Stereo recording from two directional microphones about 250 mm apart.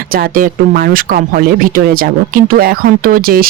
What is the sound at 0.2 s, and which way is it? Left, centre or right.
Speech, right.